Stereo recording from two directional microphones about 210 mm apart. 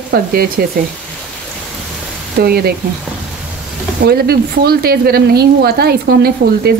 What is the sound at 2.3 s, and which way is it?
Speech, 45° right (ahead or behind).